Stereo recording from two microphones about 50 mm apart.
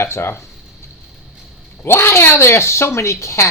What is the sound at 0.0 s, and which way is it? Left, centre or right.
Speech, left.